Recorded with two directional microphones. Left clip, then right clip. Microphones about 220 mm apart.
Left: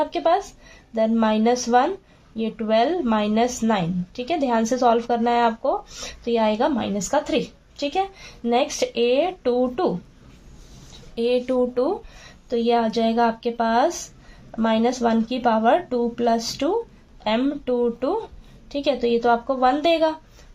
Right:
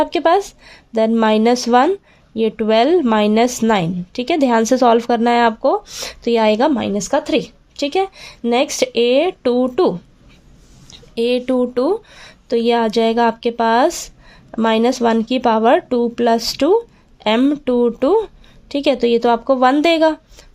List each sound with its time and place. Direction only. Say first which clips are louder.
0.0 s a woman's voice: right 6 dB; 45° right (ahead or behind)
11.1 s a woman's voice: right 4 dB; 40° right (ahead or behind)